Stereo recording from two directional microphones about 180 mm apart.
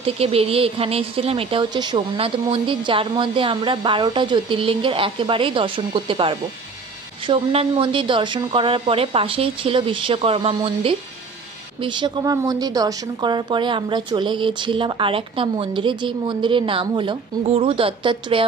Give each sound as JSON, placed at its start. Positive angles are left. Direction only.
{"t": 0.0, "sound": "a woman's voice", "side_deg": -35}